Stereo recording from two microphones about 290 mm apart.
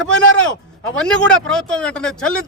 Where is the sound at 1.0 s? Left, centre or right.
Centre.